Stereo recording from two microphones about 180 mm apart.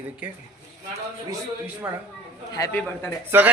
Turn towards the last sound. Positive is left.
turn(degrees=-10)  # may be behind; listen again after turning